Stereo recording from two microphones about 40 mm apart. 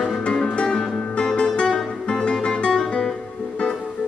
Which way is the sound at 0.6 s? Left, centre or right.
Centre.